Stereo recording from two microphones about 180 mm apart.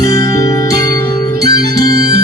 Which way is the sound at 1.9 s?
60° right (ahead or behind).